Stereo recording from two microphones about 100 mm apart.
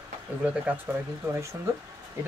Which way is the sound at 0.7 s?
15° right (ahead or behind).